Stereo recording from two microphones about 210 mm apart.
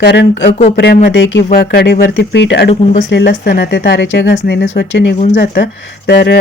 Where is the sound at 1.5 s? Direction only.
45° left (ahead or behind).